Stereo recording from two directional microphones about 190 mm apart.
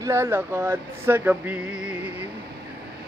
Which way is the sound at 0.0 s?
15° right (ahead or behind).